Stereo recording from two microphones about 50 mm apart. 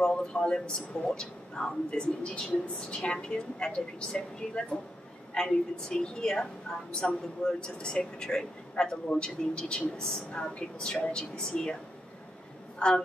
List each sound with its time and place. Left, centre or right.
0.0 s a woman's voice: centre